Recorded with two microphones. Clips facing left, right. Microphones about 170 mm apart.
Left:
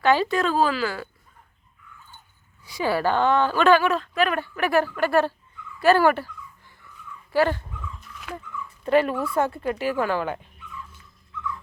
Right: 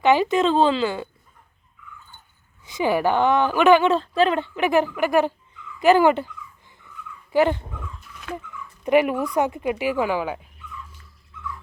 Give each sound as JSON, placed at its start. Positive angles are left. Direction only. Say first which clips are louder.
{"t": 0.0, "sound": "a woman's voice", "louder": "right 3 dB", "side_deg": -20}
{"t": 2.6, "sound": "a woman's voice", "louder": "right 3 dB", "side_deg": -20}
{"t": 7.3, "sound": "a woman's voice", "louder": "right 2 dB", "side_deg": -20}
{"t": 8.8, "sound": "a woman's voice", "louder": "right 2 dB", "side_deg": -15}